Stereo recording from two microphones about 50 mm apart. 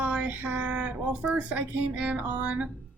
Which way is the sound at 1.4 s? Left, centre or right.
Right.